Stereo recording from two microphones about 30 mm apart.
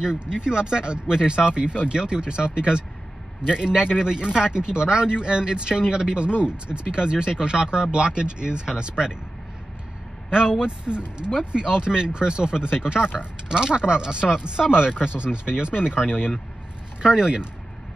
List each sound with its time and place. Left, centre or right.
0.0 s speech: right
10.6 s speech: right
17.0 s speech: right